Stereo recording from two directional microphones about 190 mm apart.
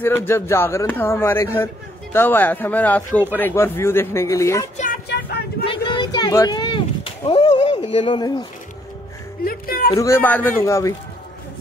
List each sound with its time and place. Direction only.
0.0 s speech: 10° left (ahead or behind)
5.7 s a sound: 20° left (ahead or behind)
9.4 s music: 50° left (ahead or behind)
9.9 s speech: 15° left (ahead or behind)